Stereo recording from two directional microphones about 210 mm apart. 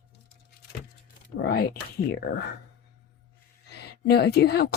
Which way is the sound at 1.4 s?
45° left (ahead or behind).